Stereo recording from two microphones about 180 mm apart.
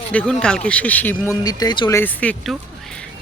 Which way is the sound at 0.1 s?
5° left (ahead or behind).